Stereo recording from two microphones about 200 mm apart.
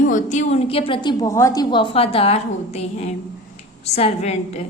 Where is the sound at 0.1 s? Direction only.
35° left (ahead or behind).